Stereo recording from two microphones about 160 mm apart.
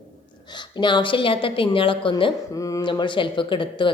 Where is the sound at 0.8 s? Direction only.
30° left (ahead or behind).